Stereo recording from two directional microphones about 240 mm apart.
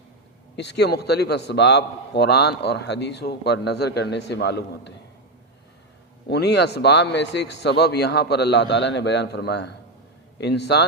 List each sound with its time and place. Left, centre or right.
0.5 s a man's voice: left
6.2 s a man's voice: left